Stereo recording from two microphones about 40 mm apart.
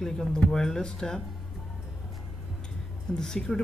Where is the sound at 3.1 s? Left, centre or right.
Centre.